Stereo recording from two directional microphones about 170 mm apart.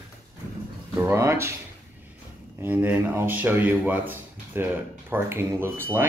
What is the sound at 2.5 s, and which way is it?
Speech, 10° right (ahead or behind).